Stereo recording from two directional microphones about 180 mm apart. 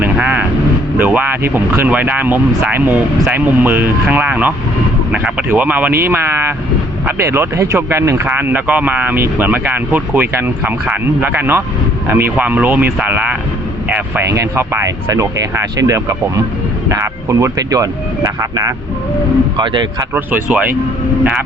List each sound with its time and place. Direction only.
0.0 s vehicle: 10° right (ahead or behind)
0.9 s speech: 10° right (ahead or behind); by 20.1 s 25° right (ahead or behind)
20.1 s speech: 10° right (ahead or behind)